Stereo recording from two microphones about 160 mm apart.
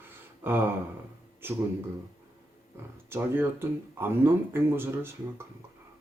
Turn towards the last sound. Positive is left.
turn(degrees=-15)  # may be behind; listen again after turning